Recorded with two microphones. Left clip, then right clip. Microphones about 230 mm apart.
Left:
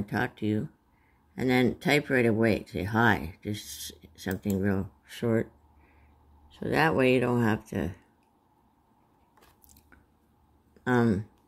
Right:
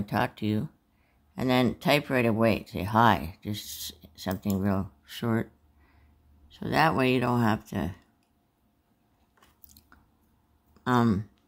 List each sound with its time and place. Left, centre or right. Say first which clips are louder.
0.0 s speech: right 2 dB; centre
6.5 s speech: right 1 dB; centre
10.7 s speech: right 1 dB; centre